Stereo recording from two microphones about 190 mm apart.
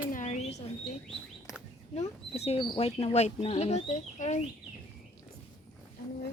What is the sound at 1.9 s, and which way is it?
Speech, 35° left (ahead or behind).